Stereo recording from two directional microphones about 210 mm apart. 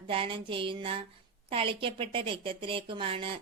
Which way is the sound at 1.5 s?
25° right (ahead or behind).